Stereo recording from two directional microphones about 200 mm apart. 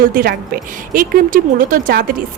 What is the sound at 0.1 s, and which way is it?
A woman's voice, 50° right (ahead or behind).